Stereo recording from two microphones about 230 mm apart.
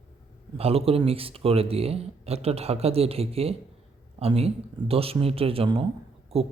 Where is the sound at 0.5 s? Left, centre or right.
Right.